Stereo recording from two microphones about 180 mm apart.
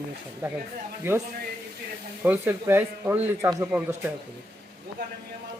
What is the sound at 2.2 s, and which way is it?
Speech, 10° right (ahead or behind).